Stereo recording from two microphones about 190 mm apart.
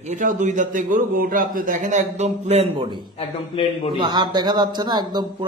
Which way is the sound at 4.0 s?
25° right (ahead or behind).